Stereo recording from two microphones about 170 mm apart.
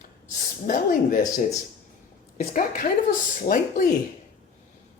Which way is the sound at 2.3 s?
55° left (ahead or behind).